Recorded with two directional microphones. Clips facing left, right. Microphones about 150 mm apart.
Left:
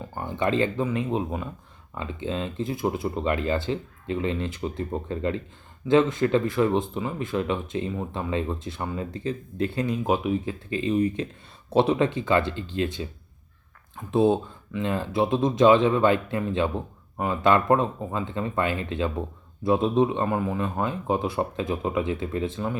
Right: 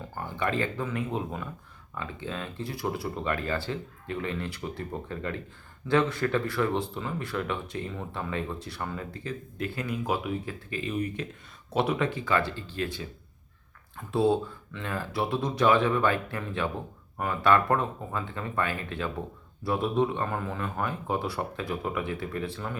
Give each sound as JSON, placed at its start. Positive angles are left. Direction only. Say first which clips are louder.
{"t": 0.2, "sound": "speech", "louder": "left 5 dB", "side_deg": 20}